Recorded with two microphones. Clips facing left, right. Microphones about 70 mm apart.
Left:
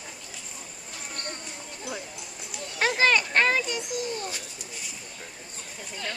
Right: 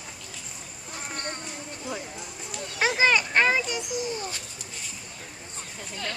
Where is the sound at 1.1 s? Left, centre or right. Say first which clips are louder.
Right 3 dB; right.